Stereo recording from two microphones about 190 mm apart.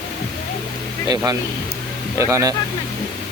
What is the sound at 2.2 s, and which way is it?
Speech, 15° right (ahead or behind).